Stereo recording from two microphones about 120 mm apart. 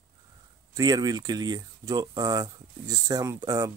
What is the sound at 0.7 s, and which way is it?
Speech, 30° right (ahead or behind).